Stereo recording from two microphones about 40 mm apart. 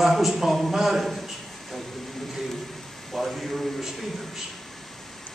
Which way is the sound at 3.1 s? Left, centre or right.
Centre.